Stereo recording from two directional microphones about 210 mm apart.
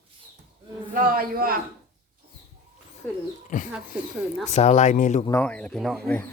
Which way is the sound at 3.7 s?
5° right (ahead or behind).